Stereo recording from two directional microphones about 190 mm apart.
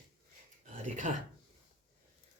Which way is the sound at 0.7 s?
40° right (ahead or behind).